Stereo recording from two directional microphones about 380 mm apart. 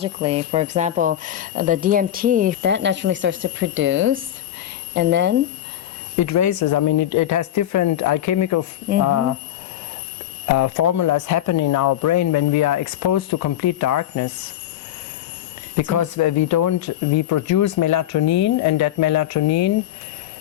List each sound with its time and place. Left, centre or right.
0.0 s speech: centre
6.1 s speech: left
10.4 s speech: left
16.0 s speech: left